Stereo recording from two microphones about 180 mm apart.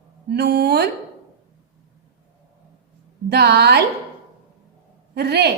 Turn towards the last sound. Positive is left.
turn(degrees=-65)  # may be behind; listen again after turning